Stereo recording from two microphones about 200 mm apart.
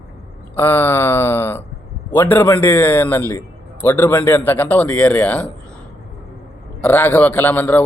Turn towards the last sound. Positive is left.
turn(degrees=10)  # may be behind; listen again after turning